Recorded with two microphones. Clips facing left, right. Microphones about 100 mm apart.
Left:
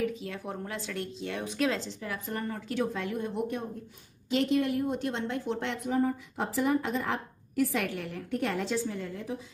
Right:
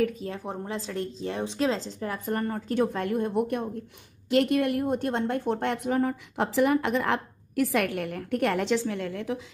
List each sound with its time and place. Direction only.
0.0 s a woman's voice: 45° right (ahead or behind); by 9.4 s 80° right